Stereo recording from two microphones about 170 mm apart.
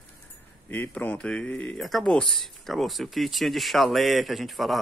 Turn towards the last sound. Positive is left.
turn(degrees=0)  # may be behind; listen again after turning